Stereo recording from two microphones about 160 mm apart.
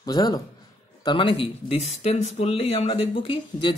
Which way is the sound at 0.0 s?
25° left (ahead or behind).